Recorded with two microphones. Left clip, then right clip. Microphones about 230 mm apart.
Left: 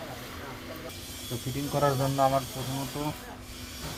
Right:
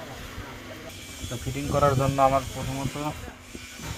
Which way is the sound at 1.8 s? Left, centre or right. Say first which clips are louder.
Right 4 dB; centre.